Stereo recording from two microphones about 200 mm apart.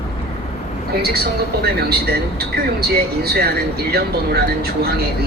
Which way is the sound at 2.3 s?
50° right (ahead or behind).